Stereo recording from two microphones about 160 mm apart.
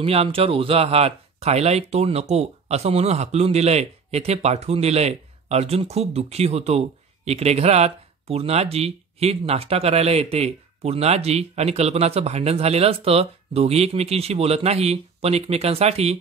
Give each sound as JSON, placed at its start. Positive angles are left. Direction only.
{"t": 0.0, "sound": "speech", "side_deg": -35}